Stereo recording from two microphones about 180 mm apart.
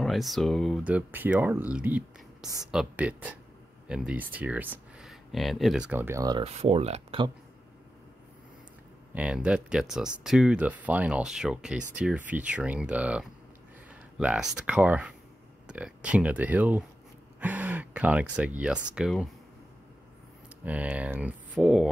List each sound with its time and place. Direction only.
0.0 s speech: centre (ahead or behind); by 6.4 s 20° right (ahead or behind)
6.4 s speech: 35° right (ahead or behind)
9.1 s speech: 5° right (ahead or behind)
17.4 s a sound: 10° right (ahead or behind)
18.3 s speech: 5° right (ahead or behind)
20.6 s speech: 10° right (ahead or behind)